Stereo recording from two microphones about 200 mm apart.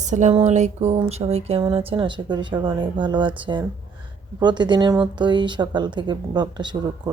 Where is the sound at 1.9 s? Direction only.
25° right (ahead or behind).